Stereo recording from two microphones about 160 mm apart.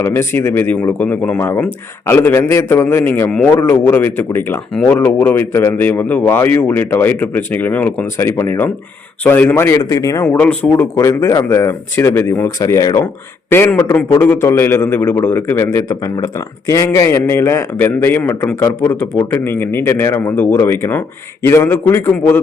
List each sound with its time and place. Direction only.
0.0 s a man's voice: 15° left (ahead or behind)